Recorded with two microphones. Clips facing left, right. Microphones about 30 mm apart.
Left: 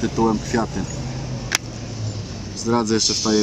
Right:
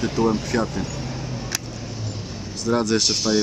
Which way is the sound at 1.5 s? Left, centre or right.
Left.